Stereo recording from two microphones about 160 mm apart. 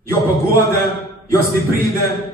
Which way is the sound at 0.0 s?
15° left (ahead or behind).